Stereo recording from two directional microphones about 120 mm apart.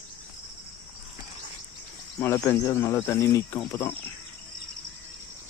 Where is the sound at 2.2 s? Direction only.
20° left (ahead or behind).